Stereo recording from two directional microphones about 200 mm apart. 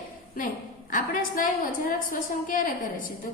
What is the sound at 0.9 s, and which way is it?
Speech, 40° left (ahead or behind).